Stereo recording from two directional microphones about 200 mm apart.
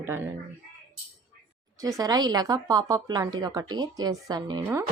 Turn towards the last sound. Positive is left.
turn(degrees=-15)  # may be behind; listen again after turning